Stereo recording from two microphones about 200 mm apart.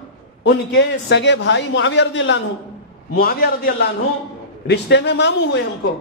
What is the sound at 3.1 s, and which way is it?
Speech, 50° left (ahead or behind).